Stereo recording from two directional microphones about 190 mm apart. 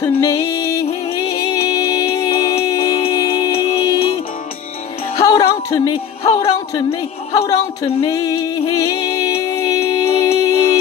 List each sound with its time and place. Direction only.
0.0 s music: 15° left (ahead or behind)
5.1 s music: 20° left (ahead or behind)